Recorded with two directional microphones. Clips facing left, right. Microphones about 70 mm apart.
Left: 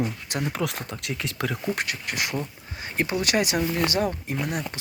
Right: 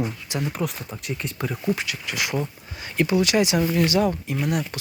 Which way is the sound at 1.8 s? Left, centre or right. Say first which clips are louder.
Even; left.